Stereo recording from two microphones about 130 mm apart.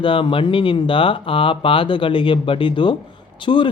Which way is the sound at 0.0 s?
40° left (ahead or behind).